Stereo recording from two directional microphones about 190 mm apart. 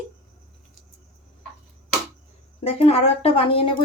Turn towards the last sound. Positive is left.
turn(degrees=30)  # may be behind; listen again after turning